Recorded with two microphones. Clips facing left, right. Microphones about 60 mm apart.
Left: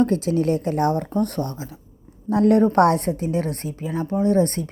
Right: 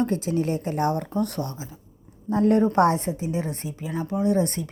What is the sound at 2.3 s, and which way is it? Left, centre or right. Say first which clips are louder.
A woman's voice: left 3 dB; left.